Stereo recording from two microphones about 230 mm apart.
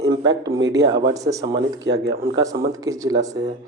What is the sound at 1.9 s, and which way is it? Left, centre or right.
Speech, right.